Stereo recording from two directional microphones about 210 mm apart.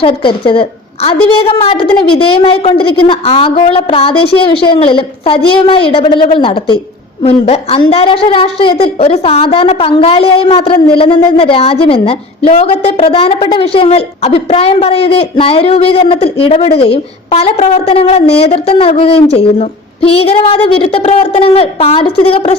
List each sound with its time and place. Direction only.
0.0 s a woman's voice: 25° left (ahead or behind)